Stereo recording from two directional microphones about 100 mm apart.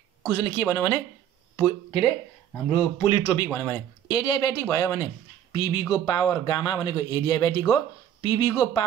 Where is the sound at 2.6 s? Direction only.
60° left (ahead or behind).